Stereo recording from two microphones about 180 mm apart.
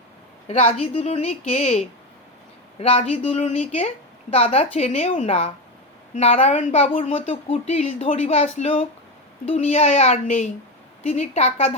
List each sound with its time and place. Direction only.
0.4 s a woman's voice: 30° left (ahead or behind)